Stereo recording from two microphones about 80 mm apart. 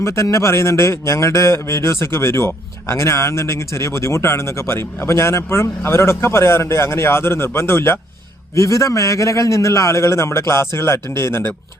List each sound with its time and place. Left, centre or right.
0.0 s a man's voice: left